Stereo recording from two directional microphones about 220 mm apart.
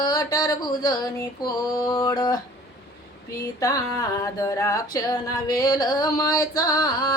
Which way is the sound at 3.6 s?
15° left (ahead or behind).